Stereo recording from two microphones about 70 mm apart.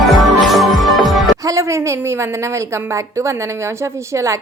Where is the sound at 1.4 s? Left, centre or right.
Right.